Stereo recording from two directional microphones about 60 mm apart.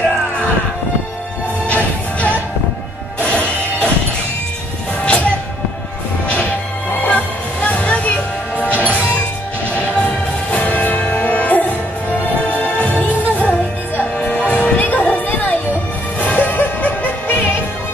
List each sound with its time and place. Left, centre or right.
1.7 s music: left
5.0 s music: left
10.0 s music: left
12.7 s music: left